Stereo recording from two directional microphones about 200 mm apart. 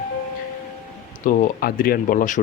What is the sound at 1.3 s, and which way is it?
Speech, 45° left (ahead or behind).